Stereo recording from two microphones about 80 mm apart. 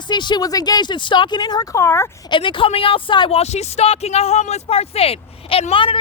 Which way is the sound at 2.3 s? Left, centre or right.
Left.